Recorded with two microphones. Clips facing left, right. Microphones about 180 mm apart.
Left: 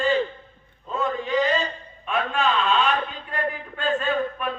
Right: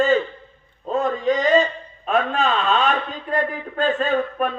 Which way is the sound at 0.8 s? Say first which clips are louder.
Right 6 dB; 40° right (ahead or behind).